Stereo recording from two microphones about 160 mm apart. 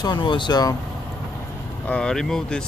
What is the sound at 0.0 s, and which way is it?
Speech, 30° left (ahead or behind).